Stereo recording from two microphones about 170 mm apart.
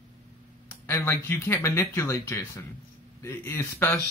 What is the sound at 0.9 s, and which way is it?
A man's voice, 15° left (ahead or behind).